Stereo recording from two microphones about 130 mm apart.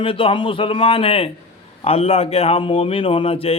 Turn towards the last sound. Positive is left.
turn(degrees=45)  # may be behind; listen again after turning